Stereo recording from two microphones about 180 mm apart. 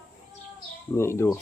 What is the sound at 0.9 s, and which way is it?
Speech, 15° left (ahead or behind).